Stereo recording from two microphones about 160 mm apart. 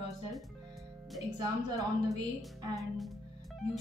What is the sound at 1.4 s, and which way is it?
A woman's voice, 20° right (ahead or behind).